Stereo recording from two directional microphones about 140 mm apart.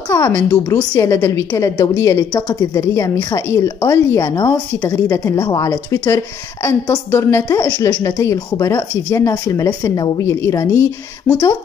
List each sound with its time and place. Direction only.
0.1 s a woman's voice: 20° left (ahead or behind)